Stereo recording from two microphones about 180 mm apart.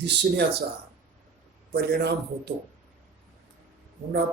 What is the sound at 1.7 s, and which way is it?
Speech, 65° right (ahead or behind).